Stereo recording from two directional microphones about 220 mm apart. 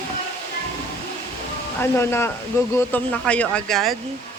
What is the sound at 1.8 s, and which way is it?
Speech, 10° left (ahead or behind).